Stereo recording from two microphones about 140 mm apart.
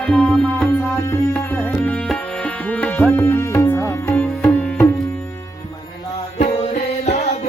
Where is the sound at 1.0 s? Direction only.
15° left (ahead or behind).